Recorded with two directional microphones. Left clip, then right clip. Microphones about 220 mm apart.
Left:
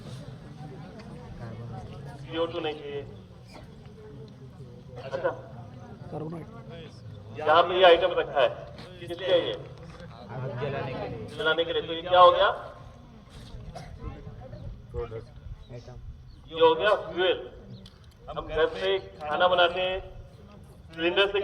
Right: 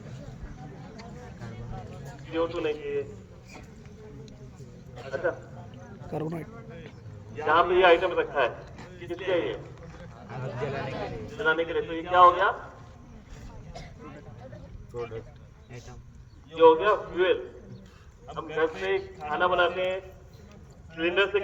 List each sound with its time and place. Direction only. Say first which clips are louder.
0.9 s a sound: right 1 dB; 50° right (ahead or behind)
2.3 s a man's voice: right 2 dB; 50° left (ahead or behind)
5.2 s a man's voice: right 1 dB; 50° left (ahead or behind)
6.1 s a man's voice: right 4 dB; 35° right (ahead or behind)
7.4 s a man's voice: left 1 dB; 50° left (ahead or behind)
10.2 s a man's voice: even; 45° right (ahead or behind)
11.4 s a man's voice: even; 50° left (ahead or behind)
14.9 s speech: even; 50° right (ahead or behind)
16.6 s a man's voice: right 2 dB; 50° left (ahead or behind)
18.5 s a man's voice: left 1 dB; 50° left (ahead or behind)
21.0 s a man's voice: even; 50° left (ahead or behind)